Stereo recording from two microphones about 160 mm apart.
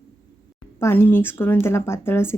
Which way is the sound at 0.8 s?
15° left (ahead or behind).